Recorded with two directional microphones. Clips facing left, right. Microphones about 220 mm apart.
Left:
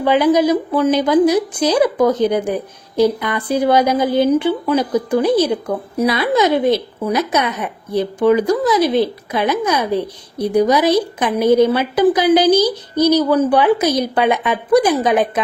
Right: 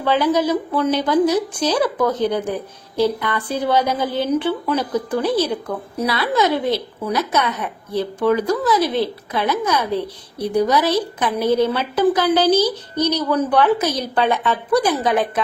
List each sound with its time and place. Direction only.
0.0 s speech: 15° left (ahead or behind)